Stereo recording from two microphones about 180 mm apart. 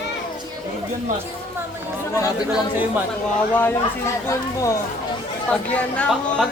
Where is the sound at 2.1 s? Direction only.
15° left (ahead or behind).